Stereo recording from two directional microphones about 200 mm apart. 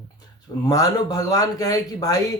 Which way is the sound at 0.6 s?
20° left (ahead or behind).